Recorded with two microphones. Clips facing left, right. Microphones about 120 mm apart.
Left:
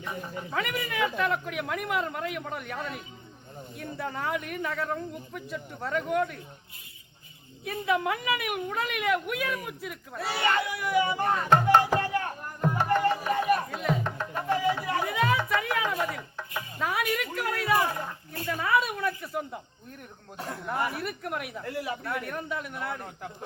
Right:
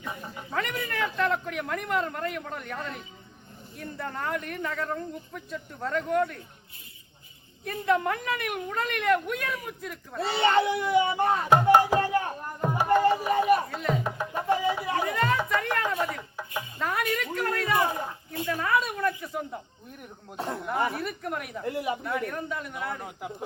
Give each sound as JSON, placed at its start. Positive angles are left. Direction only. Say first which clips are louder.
{"t": 0.0, "sound": "speech", "louder": "left 2 dB", "side_deg": 0}
{"t": 7.6, "sound": "speech", "louder": "right 2 dB", "side_deg": 5}
{"t": 10.2, "sound": "music", "louder": "right 4 dB", "side_deg": -25}
{"t": 13.7, "sound": "speech", "louder": "even", "side_deg": 0}
{"t": 14.0, "sound": "music", "louder": "right 2 dB", "side_deg": -10}
{"t": 15.0, "sound": "speech", "louder": "left 1 dB", "side_deg": 5}
{"t": 17.8, "sound": "speech", "louder": "right 2 dB", "side_deg": -20}
{"t": 18.4, "sound": "speech", "louder": "even", "side_deg": 0}
{"t": 20.3, "sound": "speech", "louder": "right 5 dB", "side_deg": -25}
{"t": 20.7, "sound": "speech", "louder": "right 1 dB", "side_deg": 0}
{"t": 21.6, "sound": "speech", "louder": "right 7 dB", "side_deg": -20}
{"t": 22.0, "sound": "speech", "louder": "right 2 dB", "side_deg": 0}